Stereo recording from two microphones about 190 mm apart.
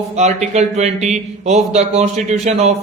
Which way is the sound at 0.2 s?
35° right (ahead or behind).